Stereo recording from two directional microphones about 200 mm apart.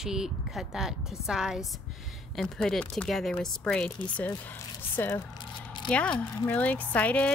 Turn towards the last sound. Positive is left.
turn(degrees=5)  # may be behind; listen again after turning